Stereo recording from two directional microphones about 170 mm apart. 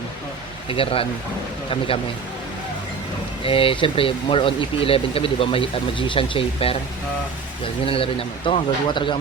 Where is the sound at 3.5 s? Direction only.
30° left (ahead or behind).